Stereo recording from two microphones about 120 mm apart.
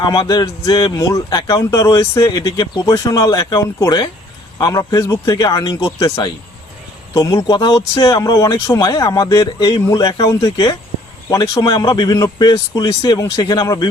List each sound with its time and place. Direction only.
0.0 s speech: 35° left (ahead or behind)